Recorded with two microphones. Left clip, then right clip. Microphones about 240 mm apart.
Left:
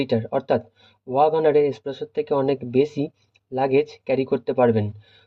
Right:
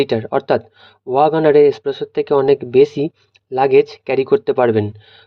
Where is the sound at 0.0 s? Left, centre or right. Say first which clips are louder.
Right 6 dB; right.